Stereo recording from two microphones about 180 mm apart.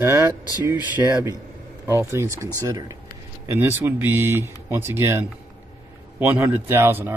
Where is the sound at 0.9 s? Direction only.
15° right (ahead or behind).